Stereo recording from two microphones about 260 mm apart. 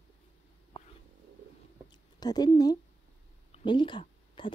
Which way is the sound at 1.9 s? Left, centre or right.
Centre.